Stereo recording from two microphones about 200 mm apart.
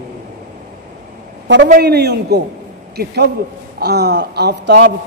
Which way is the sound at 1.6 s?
50° right (ahead or behind).